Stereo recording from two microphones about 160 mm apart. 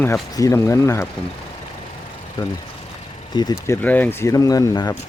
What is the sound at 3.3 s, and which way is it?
Speech, 20° left (ahead or behind).